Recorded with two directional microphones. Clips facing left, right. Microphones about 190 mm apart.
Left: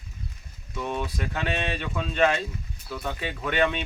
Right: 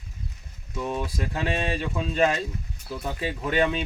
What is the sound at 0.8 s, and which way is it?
Speech, 35° right (ahead or behind).